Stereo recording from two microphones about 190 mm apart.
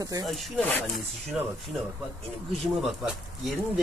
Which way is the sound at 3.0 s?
Centre (ahead or behind).